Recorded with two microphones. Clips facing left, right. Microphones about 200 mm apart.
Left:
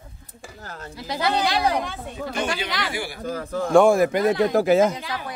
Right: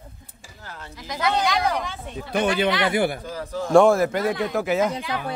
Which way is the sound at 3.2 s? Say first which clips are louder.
Left 3 dB; 50° left (ahead or behind).